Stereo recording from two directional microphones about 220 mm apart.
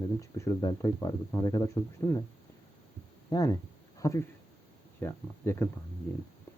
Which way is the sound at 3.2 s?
15° left (ahead or behind).